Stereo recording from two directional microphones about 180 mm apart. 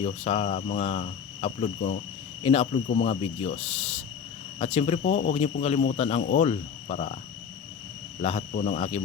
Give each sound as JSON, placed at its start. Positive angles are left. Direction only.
{"t": 0.0, "sound": "speech", "side_deg": 35}
{"t": 8.2, "sound": "speech", "side_deg": 35}